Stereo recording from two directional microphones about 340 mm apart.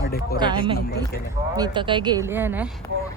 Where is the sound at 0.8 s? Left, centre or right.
Left.